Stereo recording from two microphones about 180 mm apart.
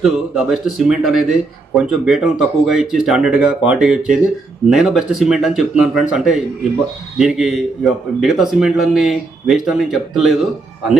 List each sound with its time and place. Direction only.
0.0 s speech: centre (ahead or behind)